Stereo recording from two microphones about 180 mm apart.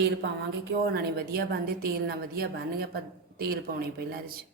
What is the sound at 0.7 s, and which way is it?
A woman's voice, 60° right (ahead or behind).